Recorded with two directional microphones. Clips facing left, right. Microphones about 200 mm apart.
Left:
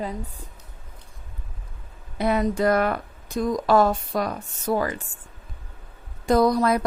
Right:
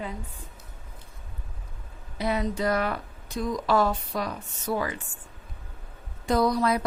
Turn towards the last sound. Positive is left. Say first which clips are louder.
# left 4 dB
turn(degrees=45)  # may be behind; listen again after turning